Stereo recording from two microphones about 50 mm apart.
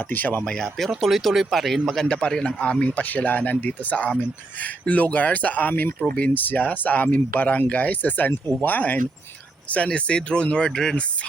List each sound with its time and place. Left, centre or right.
0.1 s speech: left
0.4 s speech: centre
0.9 s speech: centre
2.1 s speech: left
6.3 s speech: left; by 10.9 s centre